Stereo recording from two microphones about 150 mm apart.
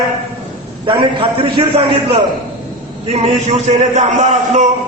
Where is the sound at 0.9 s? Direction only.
35° right (ahead or behind).